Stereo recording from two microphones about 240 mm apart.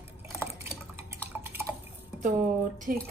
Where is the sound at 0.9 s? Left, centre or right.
Centre.